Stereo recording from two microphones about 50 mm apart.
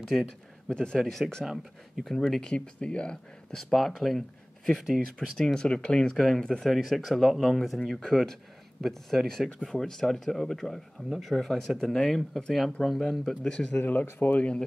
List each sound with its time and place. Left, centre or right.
0.0 s speech: centre
0.7 s speech: centre
0.9 s speech: centre
1.4 s speech: centre
2.0 s speech: centre
2.5 s speech: centre
3.5 s speech: centre
5.4 s speech: centre
9.5 s speech: centre
9.8 s speech: centre
13.4 s speech: centre